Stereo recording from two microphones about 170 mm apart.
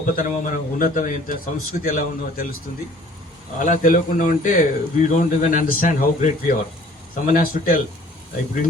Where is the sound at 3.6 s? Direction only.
50° left (ahead or behind).